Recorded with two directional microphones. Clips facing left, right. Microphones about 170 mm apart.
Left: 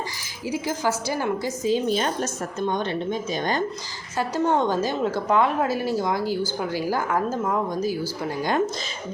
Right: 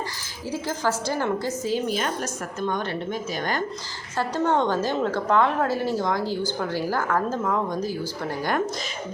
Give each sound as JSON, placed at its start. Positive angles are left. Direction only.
{"t": 0.5, "sound": "a woman's voice", "side_deg": 10}